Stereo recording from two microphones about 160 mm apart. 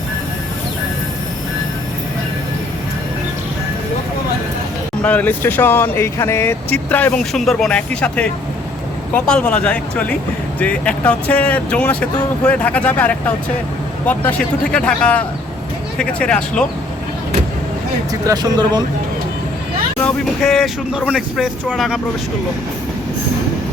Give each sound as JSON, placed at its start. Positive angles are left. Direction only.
{"t": 5.0, "sound": "speech", "side_deg": 10}
{"t": 18.1, "sound": "speech", "side_deg": -25}
{"t": 20.0, "sound": "speech", "side_deg": 5}